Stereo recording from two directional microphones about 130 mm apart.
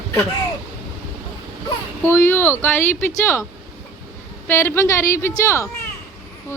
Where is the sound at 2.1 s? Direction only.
15° left (ahead or behind).